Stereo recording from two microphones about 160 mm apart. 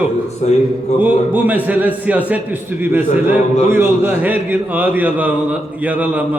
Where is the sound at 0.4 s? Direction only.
45° left (ahead or behind).